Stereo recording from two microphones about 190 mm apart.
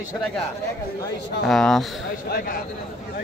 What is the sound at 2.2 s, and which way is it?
Speech, 50° left (ahead or behind).